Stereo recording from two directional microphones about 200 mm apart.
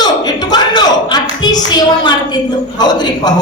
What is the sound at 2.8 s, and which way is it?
Speech, 20° left (ahead or behind).